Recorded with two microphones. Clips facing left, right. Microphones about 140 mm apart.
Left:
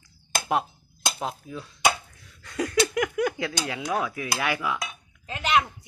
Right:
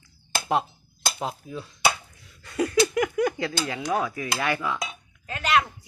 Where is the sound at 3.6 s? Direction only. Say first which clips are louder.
Right 1 dB; 5° left (ahead or behind).